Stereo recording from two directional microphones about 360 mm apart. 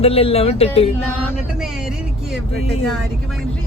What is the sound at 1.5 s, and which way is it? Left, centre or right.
Speech, centre.